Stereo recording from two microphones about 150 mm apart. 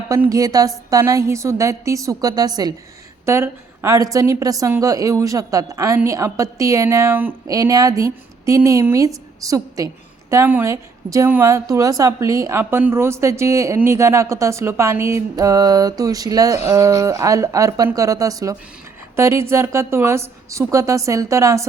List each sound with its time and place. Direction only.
0.1 s a woman's voice: 20° right (ahead or behind)
7.5 s a woman's voice: 25° right (ahead or behind)